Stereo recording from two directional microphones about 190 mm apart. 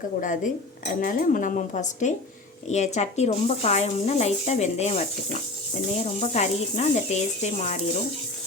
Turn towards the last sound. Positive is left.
turn(degrees=35)  # may be behind; listen again after turning